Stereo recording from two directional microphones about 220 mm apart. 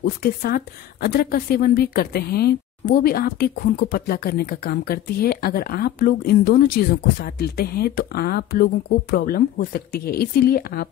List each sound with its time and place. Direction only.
0.0 s speech: 45° left (ahead or behind)